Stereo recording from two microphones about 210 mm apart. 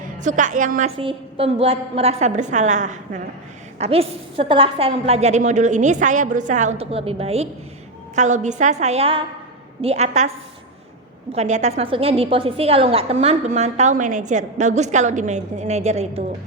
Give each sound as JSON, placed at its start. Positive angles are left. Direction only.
{"t": 0.2, "sound": "a woman's voice", "side_deg": -35}
{"t": 0.9, "sound": "a woman's voice", "side_deg": -25}